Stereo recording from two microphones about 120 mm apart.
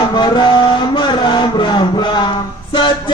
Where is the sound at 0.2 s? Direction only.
40° left (ahead or behind).